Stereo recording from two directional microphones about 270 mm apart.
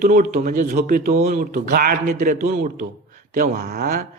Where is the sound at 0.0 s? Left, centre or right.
Right.